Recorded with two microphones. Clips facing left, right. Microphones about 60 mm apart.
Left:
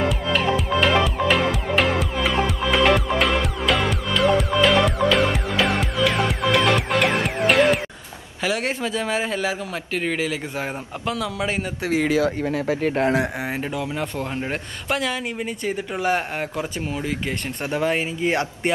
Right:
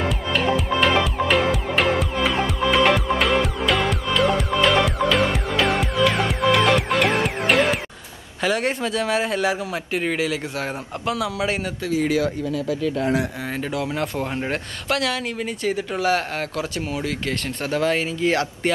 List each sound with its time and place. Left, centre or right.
0.0 s music: centre
8.4 s a man's voice: centre
11.1 s a man's voice: centre
12.4 s speech: left
13.4 s speech: left
13.7 s a man's voice: centre
14.5 s speech: centre; by 18.5 s left